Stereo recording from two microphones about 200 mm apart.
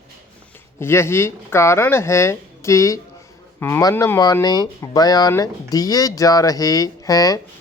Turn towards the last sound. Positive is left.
turn(degrees=15)  # may be behind; listen again after turning